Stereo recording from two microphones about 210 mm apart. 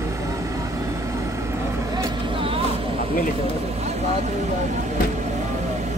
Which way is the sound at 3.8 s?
30° right (ahead or behind).